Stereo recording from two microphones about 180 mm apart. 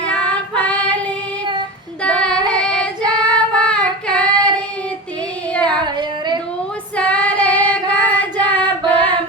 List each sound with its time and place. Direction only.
0.0 s child singing: 5° left (ahead or behind)
2.0 s child singing: 5° left (ahead or behind)
5.8 s a sound: 25° right (ahead or behind)
6.9 s child singing: 5° left (ahead or behind)